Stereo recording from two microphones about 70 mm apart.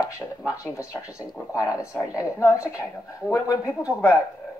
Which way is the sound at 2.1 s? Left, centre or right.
Left.